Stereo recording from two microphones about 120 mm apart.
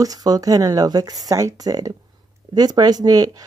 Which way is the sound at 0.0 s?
30° right (ahead or behind).